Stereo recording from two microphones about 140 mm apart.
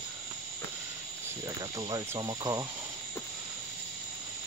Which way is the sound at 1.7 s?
25° right (ahead or behind).